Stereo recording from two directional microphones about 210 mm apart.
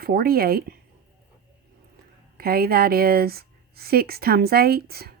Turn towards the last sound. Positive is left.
turn(degrees=-50)  # may be behind; listen again after turning